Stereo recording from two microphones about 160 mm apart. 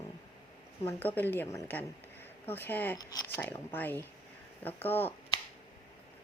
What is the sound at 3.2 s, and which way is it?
A woman's voice, 15° left (ahead or behind).